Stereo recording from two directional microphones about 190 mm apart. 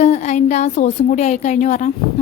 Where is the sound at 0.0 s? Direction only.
35° left (ahead or behind).